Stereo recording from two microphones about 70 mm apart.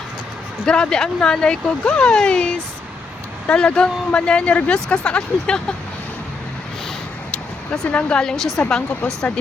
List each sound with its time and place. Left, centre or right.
0.6 s speech: centre
7.3 s a sound: centre
8.6 s speech: left